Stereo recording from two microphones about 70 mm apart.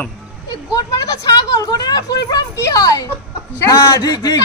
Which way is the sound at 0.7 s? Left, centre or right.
Left.